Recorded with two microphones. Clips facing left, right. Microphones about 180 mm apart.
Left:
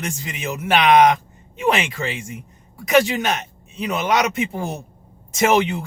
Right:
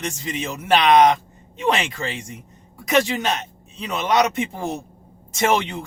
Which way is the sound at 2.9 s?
30° right (ahead or behind).